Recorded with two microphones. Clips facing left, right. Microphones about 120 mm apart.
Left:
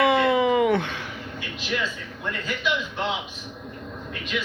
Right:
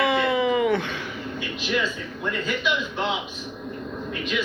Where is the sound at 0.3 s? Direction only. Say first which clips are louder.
Left 1 dB; 50° left (ahead or behind).